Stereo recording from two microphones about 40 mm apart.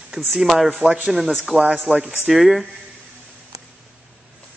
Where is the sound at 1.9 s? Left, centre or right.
Right.